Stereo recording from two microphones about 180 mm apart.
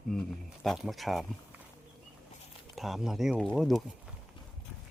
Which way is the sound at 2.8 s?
Centre (ahead or behind).